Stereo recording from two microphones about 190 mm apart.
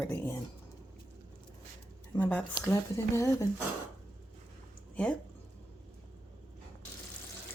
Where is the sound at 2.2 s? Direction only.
10° left (ahead or behind).